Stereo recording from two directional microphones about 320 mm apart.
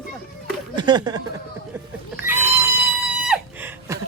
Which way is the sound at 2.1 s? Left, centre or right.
Centre.